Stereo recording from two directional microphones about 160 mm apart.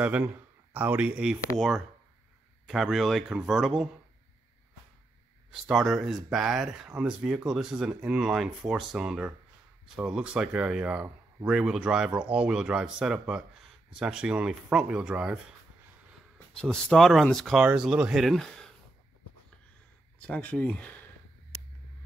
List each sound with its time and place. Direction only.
0.0 s speech: 10° right (ahead or behind)
2.6 s speech: centre (ahead or behind)
5.5 s speech: centre (ahead or behind)
16.5 s speech: 5° left (ahead or behind)
20.2 s speech: 10° left (ahead or behind)